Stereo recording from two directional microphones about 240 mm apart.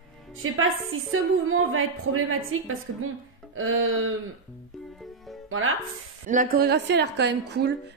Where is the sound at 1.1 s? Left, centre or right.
Right.